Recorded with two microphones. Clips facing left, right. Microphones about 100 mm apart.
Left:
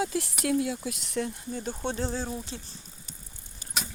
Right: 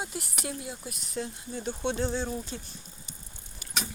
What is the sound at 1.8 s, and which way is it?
Speech, 40° left (ahead or behind).